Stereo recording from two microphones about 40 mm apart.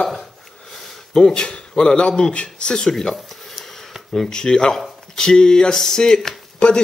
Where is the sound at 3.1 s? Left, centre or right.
Centre.